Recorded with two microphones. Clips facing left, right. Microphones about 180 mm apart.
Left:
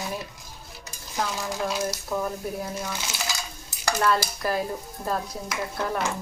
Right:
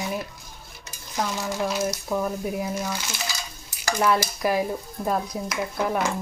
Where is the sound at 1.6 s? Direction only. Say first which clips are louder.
Right 2 dB; 5° right (ahead or behind).